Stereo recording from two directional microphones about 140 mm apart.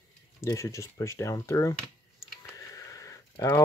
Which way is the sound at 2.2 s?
20° left (ahead or behind).